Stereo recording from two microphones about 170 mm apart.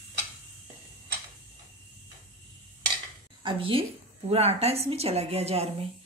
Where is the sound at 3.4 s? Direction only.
30° right (ahead or behind).